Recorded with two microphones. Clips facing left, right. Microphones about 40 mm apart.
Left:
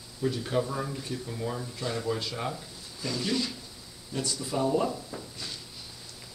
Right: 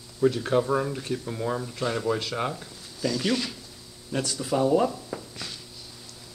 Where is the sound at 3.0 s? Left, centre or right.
Right.